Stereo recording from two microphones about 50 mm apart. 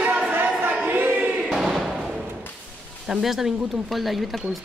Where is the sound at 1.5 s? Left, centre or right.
Centre.